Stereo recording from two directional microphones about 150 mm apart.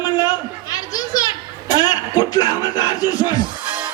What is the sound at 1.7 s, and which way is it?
A man's voice, 25° left (ahead or behind).